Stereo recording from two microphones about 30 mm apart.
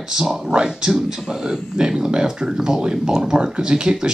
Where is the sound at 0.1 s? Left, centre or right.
Centre.